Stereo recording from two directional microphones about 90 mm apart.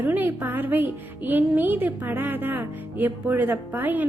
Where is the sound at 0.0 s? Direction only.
20° right (ahead or behind).